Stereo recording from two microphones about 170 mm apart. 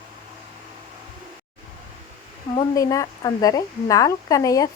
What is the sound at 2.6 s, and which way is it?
A woman's voice, 20° left (ahead or behind).